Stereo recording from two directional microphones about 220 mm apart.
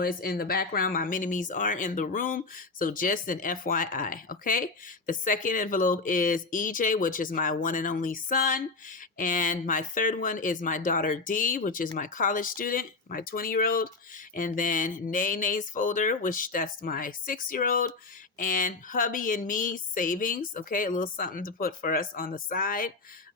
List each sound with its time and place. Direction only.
0.0 s speech: 40° left (ahead or behind)